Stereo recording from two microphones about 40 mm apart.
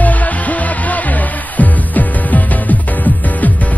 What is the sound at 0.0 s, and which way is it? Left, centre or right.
Music, left.